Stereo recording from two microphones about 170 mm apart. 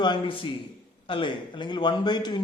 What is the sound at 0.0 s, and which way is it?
A man's voice, 30° left (ahead or behind).